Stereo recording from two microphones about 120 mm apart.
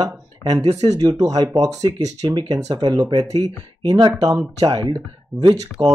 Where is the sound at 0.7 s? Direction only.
65° right (ahead or behind).